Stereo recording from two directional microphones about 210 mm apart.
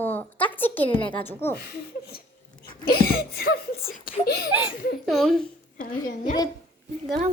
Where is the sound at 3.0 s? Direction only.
45° left (ahead or behind).